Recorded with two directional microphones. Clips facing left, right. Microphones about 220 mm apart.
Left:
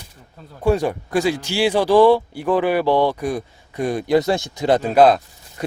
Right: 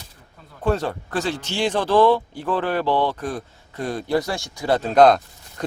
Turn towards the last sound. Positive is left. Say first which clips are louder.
# left 1 dB
turn(degrees=5)  # may be behind; listen again after turning